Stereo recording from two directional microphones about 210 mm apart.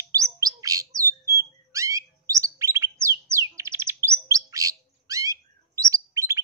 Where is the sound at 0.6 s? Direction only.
15° right (ahead or behind).